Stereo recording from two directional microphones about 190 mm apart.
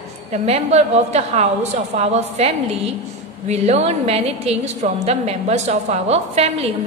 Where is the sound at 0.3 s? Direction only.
35° right (ahead or behind).